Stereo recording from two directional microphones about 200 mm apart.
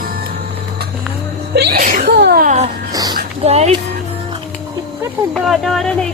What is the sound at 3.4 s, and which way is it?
Speech, 30° right (ahead or behind).